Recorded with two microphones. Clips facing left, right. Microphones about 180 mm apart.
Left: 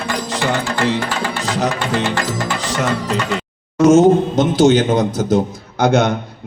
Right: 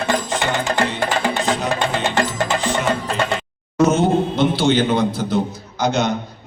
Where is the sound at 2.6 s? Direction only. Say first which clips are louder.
Even; 80° left.